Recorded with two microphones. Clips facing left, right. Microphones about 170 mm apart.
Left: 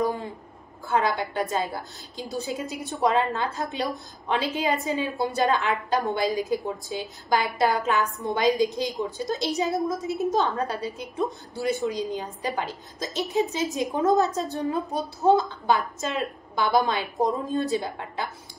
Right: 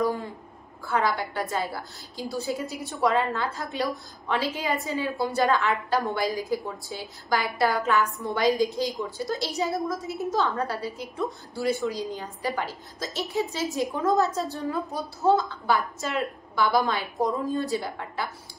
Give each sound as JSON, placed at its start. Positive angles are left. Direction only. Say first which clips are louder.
{"t": 0.8, "sound": "a woman's voice", "louder": "left 1 dB", "side_deg": 20}